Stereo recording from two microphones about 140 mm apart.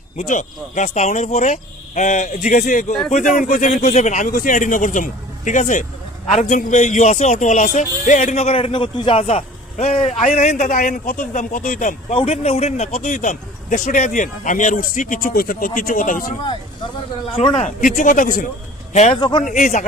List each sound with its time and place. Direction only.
0.2 s a man's voice: 60° left (ahead or behind)
12.1 s a man's voice: 45° left (ahead or behind); by 16.3 s 75° left (ahead or behind)
17.3 s a man's voice: 40° left (ahead or behind)
17.7 s a man's voice: 65° left (ahead or behind)
19.1 s a man's voice: 35° left (ahead or behind)
19.5 s speech: 65° left (ahead or behind)